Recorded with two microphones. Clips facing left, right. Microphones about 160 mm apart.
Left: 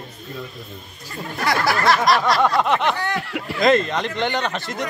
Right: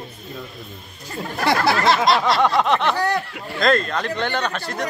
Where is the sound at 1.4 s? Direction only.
25° right (ahead or behind).